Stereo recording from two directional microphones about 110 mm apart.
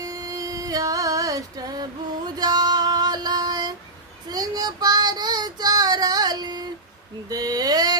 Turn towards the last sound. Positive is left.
turn(degrees=-35)  # may be behind; listen again after turning